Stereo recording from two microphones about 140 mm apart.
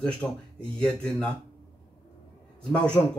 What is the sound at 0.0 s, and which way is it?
Speech, 5° left (ahead or behind).